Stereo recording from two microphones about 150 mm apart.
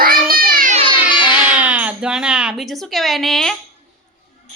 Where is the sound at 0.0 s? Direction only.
75° right (ahead or behind).